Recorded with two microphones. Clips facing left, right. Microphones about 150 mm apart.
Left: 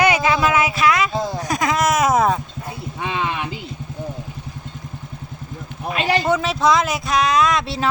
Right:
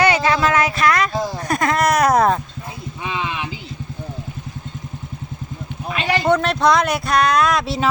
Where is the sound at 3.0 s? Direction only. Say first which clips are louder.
Left 2 dB; 55° left (ahead or behind).